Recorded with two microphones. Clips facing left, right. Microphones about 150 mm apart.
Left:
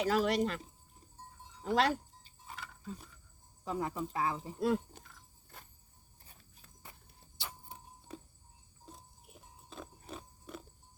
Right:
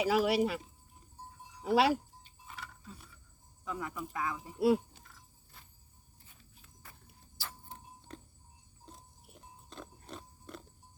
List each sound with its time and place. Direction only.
0.0 s speech: 10° right (ahead or behind)
1.5 s wind chime: 10° right (ahead or behind)
2.6 s a sound: centre (ahead or behind)
3.6 s speech: 35° left (ahead or behind)
7.3 s keys jangling: 15° left (ahead or behind)
8.9 s pig: centre (ahead or behind)